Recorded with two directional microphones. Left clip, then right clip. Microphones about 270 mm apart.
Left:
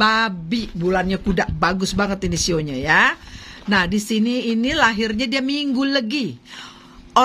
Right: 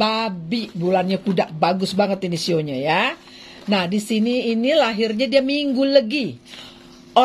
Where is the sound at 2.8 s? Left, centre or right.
Left.